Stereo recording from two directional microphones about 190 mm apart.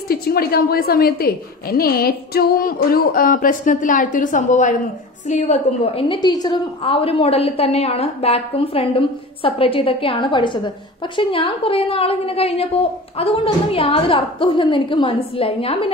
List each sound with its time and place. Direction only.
0.1 s a woman's voice: 55° left (ahead or behind); by 15.9 s 30° left (ahead or behind)